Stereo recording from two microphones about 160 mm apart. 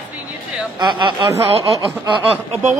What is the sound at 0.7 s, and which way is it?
Speech, 30° right (ahead or behind).